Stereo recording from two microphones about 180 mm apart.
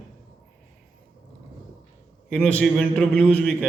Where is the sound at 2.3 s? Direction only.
5° left (ahead or behind).